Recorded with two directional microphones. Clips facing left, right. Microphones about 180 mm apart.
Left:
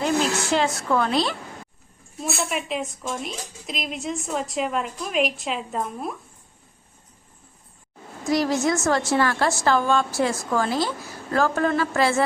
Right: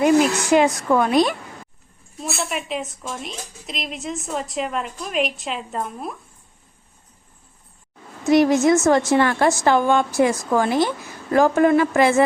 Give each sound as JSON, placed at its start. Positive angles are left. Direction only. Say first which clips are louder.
{"t": 0.0, "sound": "a woman's voice", "louder": "right 6 dB", "side_deg": -15}
{"t": 2.2, "sound": "a woman's voice", "louder": "even", "side_deg": 0}
{"t": 8.3, "sound": "a woman's voice", "louder": "right 7 dB", "side_deg": -20}